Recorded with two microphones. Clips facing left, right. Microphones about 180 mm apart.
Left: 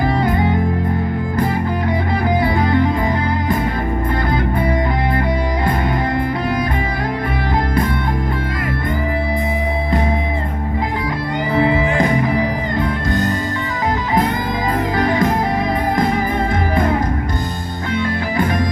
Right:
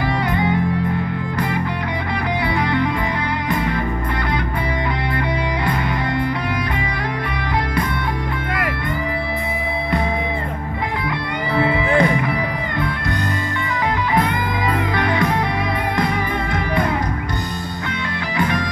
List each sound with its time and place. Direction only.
2.4 s music: 45° left (ahead or behind)
11.6 s music: 40° left (ahead or behind)
15.0 s music: 45° left (ahead or behind)